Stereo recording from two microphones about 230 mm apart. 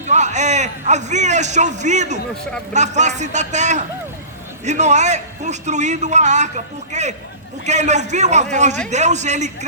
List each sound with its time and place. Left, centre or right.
0.1 s a man's voice: right